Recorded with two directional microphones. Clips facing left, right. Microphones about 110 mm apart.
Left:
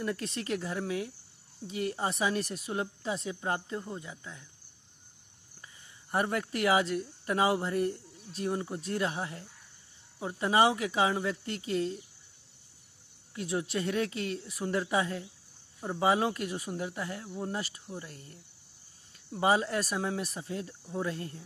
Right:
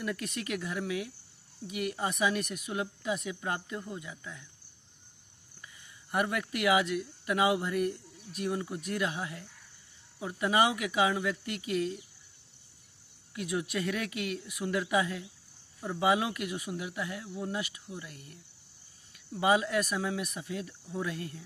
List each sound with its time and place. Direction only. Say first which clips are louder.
0.0 s speech: left 1 dB; 30° left (ahead or behind)
5.6 s speech: right 1 dB; 30° left (ahead or behind)
13.3 s speech: left 1 dB; 30° left (ahead or behind)